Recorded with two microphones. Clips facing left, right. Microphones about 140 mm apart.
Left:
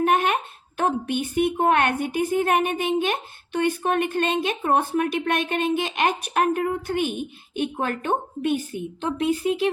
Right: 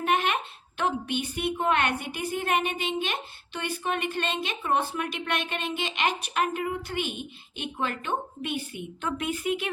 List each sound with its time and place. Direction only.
0.0 s a sound: 45° left (ahead or behind)
0.8 s a woman's voice: 45° left (ahead or behind)
9.0 s speech: 30° left (ahead or behind)